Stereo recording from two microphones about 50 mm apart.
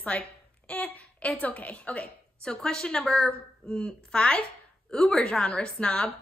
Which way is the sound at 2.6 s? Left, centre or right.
Centre.